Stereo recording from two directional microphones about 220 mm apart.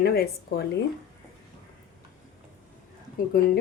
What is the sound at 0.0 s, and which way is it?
Speech, 45° left (ahead or behind).